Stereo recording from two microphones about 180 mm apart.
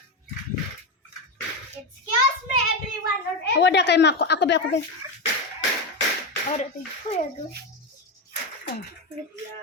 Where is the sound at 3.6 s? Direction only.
75° left (ahead or behind).